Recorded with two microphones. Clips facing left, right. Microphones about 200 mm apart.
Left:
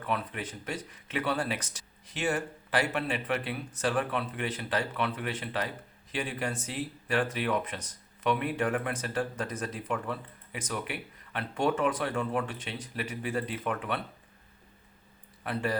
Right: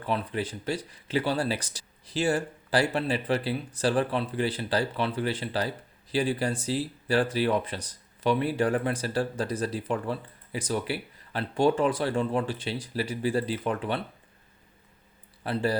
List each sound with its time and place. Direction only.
0.0 s speech: 30° right (ahead or behind)
15.4 s speech: 30° right (ahead or behind)